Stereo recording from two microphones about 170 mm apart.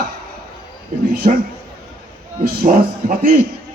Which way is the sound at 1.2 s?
50° right (ahead or behind).